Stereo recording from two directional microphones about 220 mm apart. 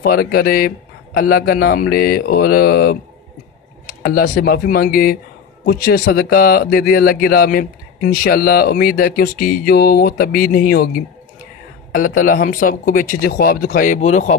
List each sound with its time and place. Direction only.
0.0 s speech: 45° left (ahead or behind)
4.0 s speech: 45° left (ahead or behind)
12.3 s speech: 40° left (ahead or behind)